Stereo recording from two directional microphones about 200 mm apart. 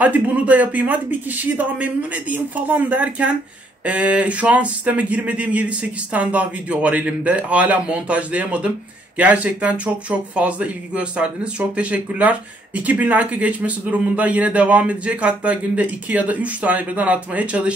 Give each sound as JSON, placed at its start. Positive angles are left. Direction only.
{"t": 0.0, "sound": "speech", "side_deg": -10}